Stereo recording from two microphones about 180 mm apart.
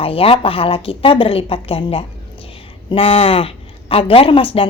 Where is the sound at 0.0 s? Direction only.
30° left (ahead or behind).